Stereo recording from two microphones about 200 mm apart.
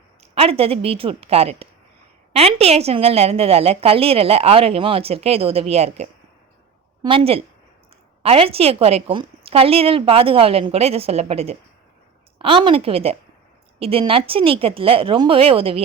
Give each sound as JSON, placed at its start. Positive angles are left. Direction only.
{"t": 0.3, "sound": "a woman's voice", "side_deg": -30}